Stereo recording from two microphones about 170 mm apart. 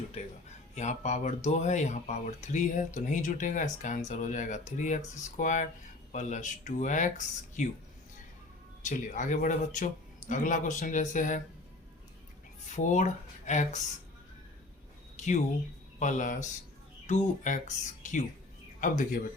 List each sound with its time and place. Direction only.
0.8 s speech: 40° left (ahead or behind)
8.8 s speech: 45° left (ahead or behind)
12.7 s speech: 45° left (ahead or behind)
15.1 s a sound: 45° left (ahead or behind)
16.0 s speech: 45° left (ahead or behind)